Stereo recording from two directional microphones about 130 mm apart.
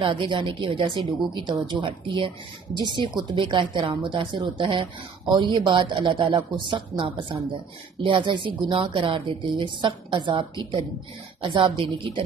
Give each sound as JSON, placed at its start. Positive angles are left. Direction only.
{"t": 0.0, "sound": "a woman's voice", "side_deg": -40}
{"t": 11.4, "sound": "a woman's voice", "side_deg": -40}